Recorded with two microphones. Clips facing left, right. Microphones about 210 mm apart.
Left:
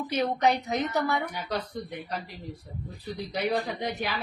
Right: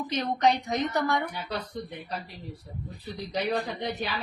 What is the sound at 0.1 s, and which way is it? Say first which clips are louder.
A woman's voice: even; 10° left (ahead or behind).